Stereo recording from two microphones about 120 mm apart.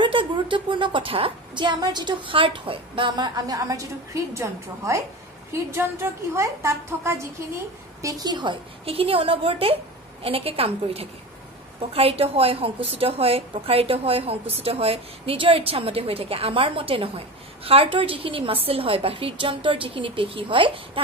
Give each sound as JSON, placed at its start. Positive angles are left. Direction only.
{"t": 0.0, "sound": "a woman's voice", "side_deg": -45}